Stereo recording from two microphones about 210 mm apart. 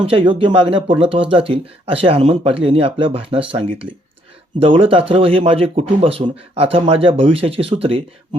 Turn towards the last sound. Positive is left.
turn(degrees=-25)  # may be behind; listen again after turning